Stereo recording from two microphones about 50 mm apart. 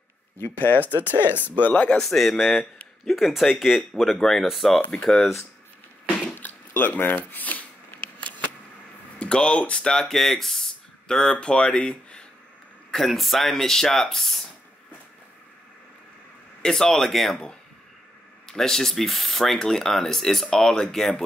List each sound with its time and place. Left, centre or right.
0.4 s speech: left
0.8 s speech: right
1.6 s speech: left
2.0 s speech: centre
4.9 s speech: centre
6.3 s a sound: left
7.2 s speech: left
8.2 s a sound: left
9.2 s speech: left
12.9 s speech: centre
16.6 s speech: centre
18.5 s speech: centre